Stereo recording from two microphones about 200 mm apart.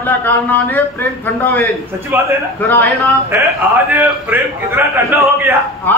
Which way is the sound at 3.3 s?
10° right (ahead or behind).